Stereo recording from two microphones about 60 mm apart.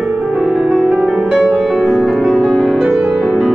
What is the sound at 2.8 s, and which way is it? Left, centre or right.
Music, centre.